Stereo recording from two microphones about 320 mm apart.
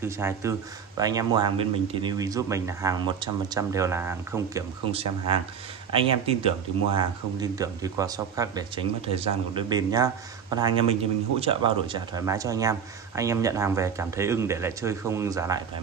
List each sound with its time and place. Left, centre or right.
0.0 s speech: centre